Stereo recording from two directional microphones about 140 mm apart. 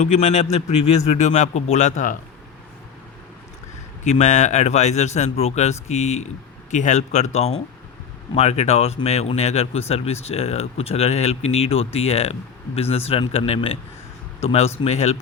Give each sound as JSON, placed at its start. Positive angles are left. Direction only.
{"t": 0.0, "sound": "a man's voice", "side_deg": 60}
{"t": 4.0, "sound": "a man's voice", "side_deg": 55}